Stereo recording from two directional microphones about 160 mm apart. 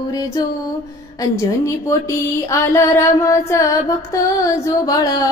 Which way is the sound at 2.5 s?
15° left (ahead or behind).